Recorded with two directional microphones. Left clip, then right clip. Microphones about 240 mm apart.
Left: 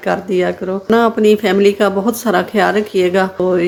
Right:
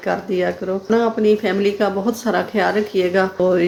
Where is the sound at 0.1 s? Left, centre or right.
Centre.